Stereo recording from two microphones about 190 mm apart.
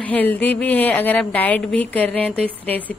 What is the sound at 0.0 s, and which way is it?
A woman's voice, 10° left (ahead or behind).